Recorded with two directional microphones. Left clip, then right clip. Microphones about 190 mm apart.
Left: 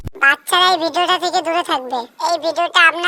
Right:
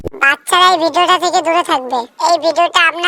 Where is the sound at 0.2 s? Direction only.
20° right (ahead or behind).